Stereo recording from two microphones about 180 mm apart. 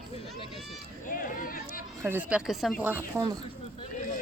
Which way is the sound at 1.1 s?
50° left (ahead or behind).